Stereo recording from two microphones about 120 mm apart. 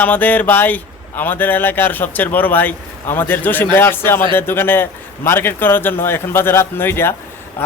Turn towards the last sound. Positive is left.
turn(degrees=20)  # may be behind; listen again after turning